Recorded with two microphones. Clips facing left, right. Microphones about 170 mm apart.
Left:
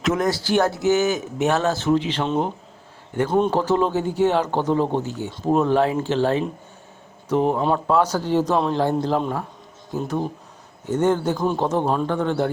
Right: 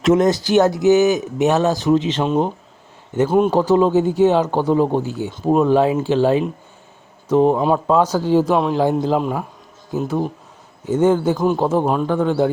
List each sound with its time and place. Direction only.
0.0 s speech: 25° right (ahead or behind)